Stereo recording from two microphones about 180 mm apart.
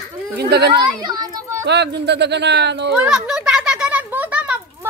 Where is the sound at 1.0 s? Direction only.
25° right (ahead or behind).